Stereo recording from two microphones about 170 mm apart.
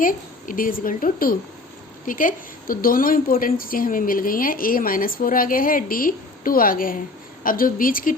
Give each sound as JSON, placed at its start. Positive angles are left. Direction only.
{"t": 0.0, "sound": "a woman's voice", "side_deg": 55}